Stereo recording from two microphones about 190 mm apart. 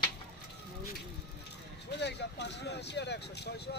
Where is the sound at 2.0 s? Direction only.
65° left (ahead or behind).